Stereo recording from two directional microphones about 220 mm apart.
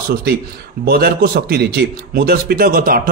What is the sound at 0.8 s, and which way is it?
A man's voice, 45° right (ahead or behind).